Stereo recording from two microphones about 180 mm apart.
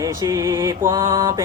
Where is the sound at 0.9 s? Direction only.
25° right (ahead or behind).